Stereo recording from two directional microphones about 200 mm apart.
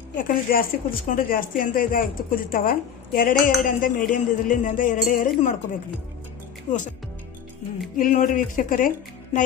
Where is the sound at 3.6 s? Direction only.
40° left (ahead or behind).